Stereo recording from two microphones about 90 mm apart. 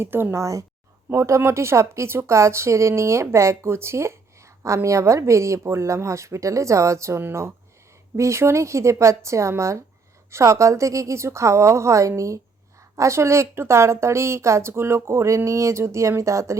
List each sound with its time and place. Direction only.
0.0 s a woman's voice: 25° right (ahead or behind)